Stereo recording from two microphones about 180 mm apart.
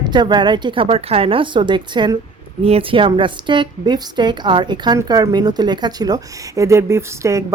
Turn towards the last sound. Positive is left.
turn(degrees=-15)  # may be behind; listen again after turning